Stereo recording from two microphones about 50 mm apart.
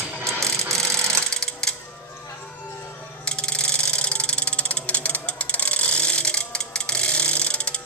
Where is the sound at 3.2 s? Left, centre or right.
Left.